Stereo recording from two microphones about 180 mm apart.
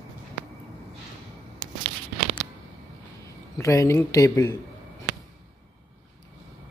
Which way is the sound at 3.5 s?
15° left (ahead or behind).